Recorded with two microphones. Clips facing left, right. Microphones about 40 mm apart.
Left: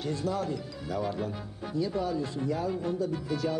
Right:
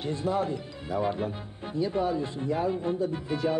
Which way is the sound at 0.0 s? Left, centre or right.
Right.